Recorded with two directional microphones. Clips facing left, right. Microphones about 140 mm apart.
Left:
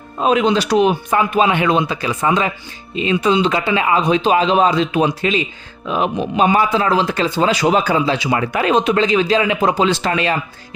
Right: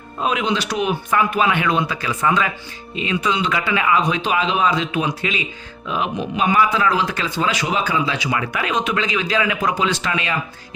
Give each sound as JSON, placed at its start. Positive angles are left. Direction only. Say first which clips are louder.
{"t": 0.2, "sound": "speech", "louder": "left 6 dB", "side_deg": 35}